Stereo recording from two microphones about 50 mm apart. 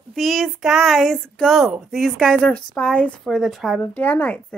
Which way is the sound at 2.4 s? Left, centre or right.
Left.